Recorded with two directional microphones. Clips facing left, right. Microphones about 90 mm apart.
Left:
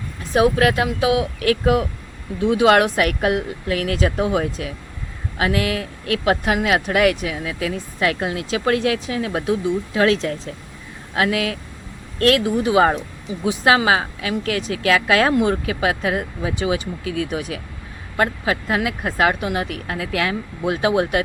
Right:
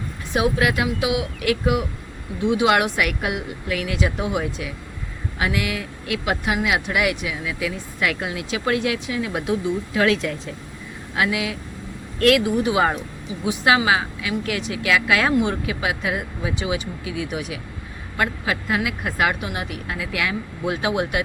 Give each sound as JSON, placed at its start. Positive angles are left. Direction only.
{"t": 0.3, "sound": "speech", "side_deg": 40}
{"t": 6.2, "sound": "speech", "side_deg": 45}
{"t": 12.2, "sound": "speech", "side_deg": 35}